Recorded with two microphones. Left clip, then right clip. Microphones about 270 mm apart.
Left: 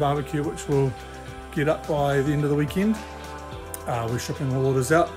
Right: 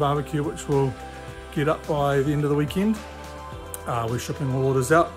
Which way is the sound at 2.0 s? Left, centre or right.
Centre.